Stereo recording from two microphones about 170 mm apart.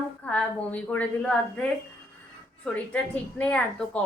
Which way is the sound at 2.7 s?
10° left (ahead or behind).